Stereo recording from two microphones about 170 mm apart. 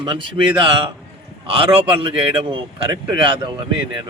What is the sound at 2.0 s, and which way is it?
A man's voice, 30° right (ahead or behind).